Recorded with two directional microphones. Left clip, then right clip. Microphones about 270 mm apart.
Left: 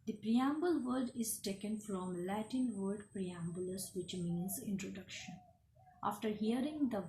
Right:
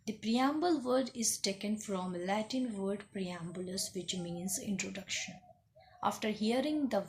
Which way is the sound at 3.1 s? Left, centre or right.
Right.